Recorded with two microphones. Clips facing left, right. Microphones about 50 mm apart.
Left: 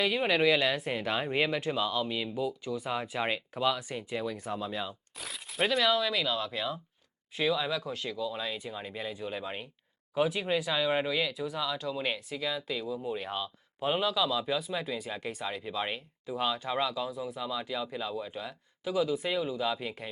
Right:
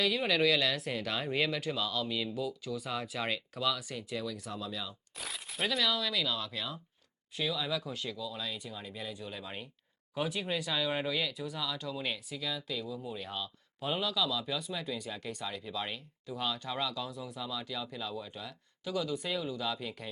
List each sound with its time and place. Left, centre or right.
0.0 s speech: left
5.1 s crumpling: centre
5.6 s speech: centre
7.4 s speech: left
7.7 s speech: centre
8.1 s speech: left
17.1 s speech: centre
17.4 s speech: left